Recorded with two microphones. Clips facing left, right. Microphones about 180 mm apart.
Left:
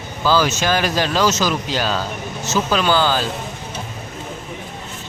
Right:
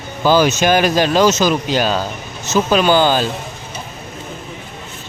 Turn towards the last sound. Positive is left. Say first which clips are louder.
# right 4 dB
turn(degrees=-15)  # may be behind; listen again after turning